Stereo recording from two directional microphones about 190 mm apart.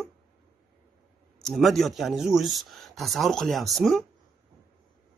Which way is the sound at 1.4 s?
Centre (ahead or behind).